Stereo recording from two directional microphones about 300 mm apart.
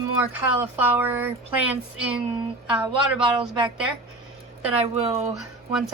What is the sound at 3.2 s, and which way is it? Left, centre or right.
Speech, centre.